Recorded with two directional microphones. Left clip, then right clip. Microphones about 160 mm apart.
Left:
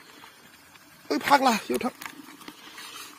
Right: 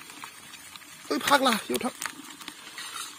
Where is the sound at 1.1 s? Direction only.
Centre (ahead or behind).